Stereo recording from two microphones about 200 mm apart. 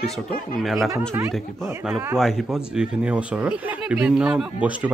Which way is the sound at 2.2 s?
Centre (ahead or behind).